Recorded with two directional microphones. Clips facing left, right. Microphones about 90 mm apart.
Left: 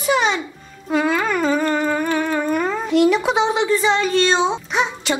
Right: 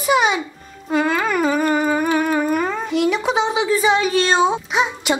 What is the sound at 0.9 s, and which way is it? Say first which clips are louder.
Humming: even; centre (ahead or behind).